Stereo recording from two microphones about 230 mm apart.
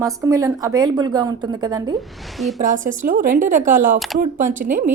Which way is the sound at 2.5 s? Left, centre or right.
Right.